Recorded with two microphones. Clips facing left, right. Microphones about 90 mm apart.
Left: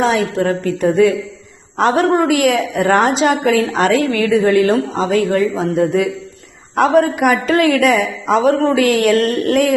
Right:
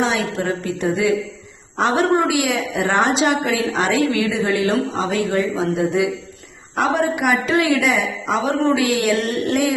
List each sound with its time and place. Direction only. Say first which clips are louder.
0.0 s a woman's voice: left 5 dB; 45° left (ahead or behind)